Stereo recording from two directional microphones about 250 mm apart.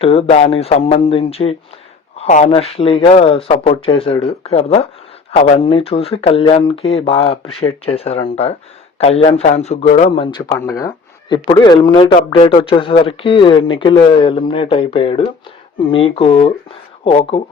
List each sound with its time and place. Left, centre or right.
0.0 s speech: left